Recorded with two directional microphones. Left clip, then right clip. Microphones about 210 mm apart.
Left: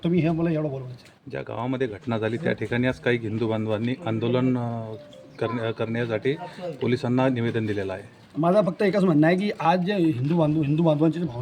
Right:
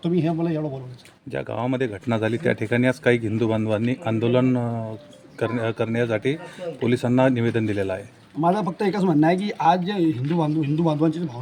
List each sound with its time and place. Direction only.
0.0 s a man's voice: 5° right (ahead or behind)
1.3 s a man's voice: 50° right (ahead or behind)
8.4 s speech: centre (ahead or behind)